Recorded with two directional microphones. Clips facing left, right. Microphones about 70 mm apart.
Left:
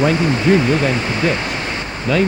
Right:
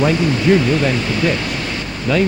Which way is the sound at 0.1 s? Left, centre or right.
Left.